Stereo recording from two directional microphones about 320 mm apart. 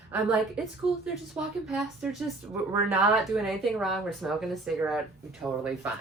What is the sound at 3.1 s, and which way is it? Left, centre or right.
Speech, centre.